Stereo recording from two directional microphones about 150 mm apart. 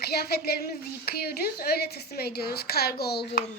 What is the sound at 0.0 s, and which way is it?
A woman's voice, 90° left.